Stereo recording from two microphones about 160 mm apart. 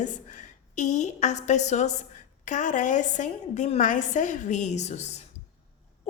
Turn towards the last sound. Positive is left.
turn(degrees=45)  # may be behind; listen again after turning